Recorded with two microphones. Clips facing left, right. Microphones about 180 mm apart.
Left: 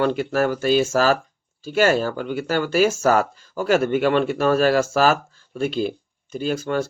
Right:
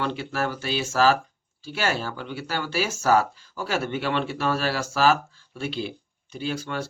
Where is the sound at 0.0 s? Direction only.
45° left (ahead or behind).